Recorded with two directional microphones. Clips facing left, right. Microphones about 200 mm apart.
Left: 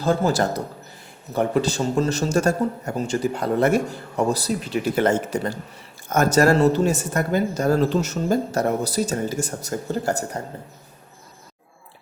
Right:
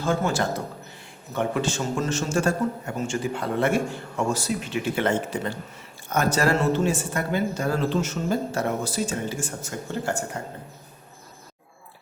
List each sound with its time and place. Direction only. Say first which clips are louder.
0.0 s a man's voice: left 4 dB; 35° left (ahead or behind)